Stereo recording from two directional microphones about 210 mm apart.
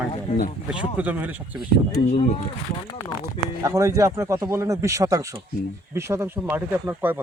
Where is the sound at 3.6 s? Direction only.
15° right (ahead or behind).